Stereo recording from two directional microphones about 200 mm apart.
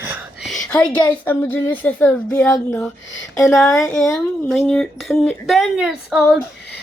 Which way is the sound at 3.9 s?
Centre (ahead or behind).